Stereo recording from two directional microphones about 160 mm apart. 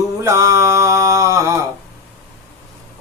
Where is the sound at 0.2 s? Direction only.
20° right (ahead or behind).